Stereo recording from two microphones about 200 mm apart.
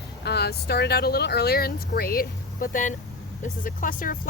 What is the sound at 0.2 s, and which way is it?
Speech, 55° left (ahead or behind).